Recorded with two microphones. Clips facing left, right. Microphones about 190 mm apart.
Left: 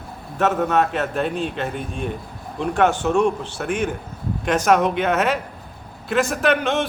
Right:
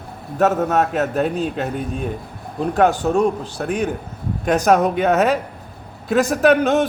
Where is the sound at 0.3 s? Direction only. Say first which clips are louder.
Right 2 dB; 40° right (ahead or behind).